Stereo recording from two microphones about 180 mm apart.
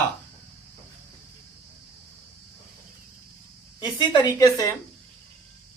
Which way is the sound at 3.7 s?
25° left (ahead or behind).